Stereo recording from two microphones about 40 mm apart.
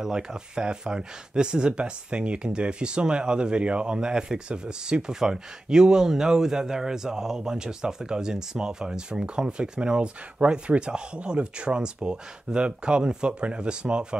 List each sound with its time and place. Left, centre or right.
0.0 s speech: centre